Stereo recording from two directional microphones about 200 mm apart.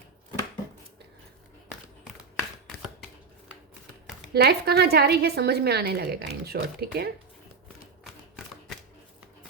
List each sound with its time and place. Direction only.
4.4 s a woman's voice: 55° right (ahead or behind)